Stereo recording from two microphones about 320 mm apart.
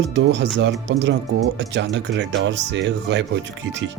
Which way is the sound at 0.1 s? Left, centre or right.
Right.